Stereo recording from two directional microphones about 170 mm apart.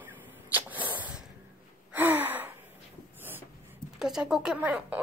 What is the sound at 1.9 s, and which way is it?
Gasp, 10° right (ahead or behind).